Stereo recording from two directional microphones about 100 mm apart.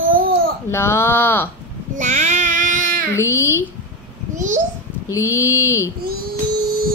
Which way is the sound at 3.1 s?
25° left (ahead or behind).